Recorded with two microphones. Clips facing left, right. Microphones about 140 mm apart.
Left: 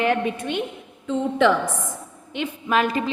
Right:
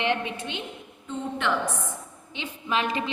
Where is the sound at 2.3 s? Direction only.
50° left (ahead or behind).